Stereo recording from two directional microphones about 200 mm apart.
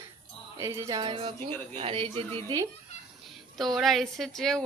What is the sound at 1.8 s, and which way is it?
Speech, 30° right (ahead or behind).